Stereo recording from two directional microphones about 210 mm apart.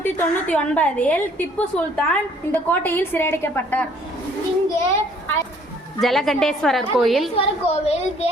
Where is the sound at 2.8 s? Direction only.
10° left (ahead or behind).